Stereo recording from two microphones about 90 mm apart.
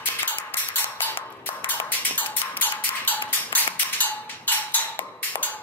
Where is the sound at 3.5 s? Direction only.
20° left (ahead or behind).